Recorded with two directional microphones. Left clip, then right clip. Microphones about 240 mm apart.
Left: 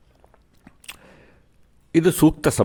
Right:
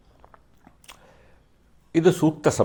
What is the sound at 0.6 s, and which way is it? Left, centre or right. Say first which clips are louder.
Biting: left 8 dB; left.